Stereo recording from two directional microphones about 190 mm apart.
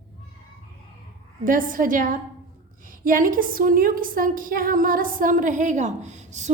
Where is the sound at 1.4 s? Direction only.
45° right (ahead or behind).